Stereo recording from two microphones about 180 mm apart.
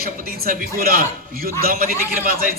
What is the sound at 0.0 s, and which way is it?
A man's voice, 55° right (ahead or behind).